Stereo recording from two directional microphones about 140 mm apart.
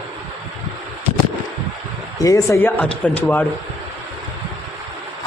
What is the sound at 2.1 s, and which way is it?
Speech, 25° left (ahead or behind).